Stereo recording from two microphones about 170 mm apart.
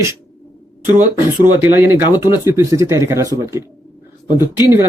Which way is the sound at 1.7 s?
10° right (ahead or behind).